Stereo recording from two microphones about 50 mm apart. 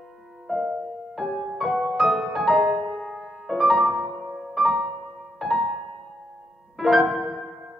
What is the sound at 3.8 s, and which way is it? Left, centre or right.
Music, centre.